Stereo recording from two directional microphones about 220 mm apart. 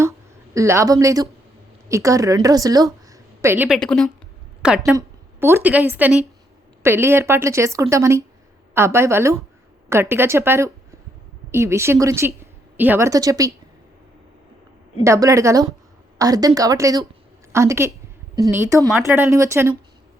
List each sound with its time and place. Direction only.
0.5 s a woman's voice: 15° right (ahead or behind)
3.8 s a woman's voice: centre (ahead or behind); by 13.5 s 15° right (ahead or behind)
15.0 s a woman's voice: 15° right (ahead or behind)